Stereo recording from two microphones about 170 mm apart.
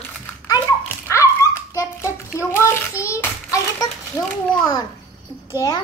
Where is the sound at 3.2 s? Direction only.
20° left (ahead or behind).